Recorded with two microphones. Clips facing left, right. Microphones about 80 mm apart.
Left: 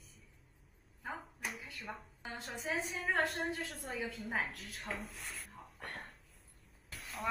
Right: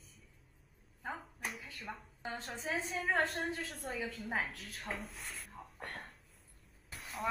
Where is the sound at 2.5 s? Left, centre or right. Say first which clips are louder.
Left 1 dB; centre.